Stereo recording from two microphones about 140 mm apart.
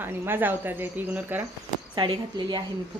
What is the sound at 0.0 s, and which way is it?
Speech, 15° right (ahead or behind).